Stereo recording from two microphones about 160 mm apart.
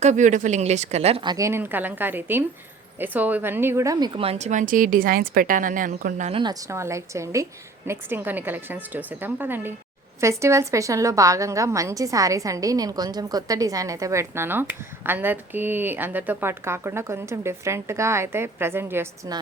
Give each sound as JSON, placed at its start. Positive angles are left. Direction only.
{"t": 0.0, "sound": "a woman's voice", "side_deg": -50}
{"t": 1.2, "sound": "a woman's voice", "side_deg": -25}
{"t": 6.3, "sound": "a woman's voice", "side_deg": -25}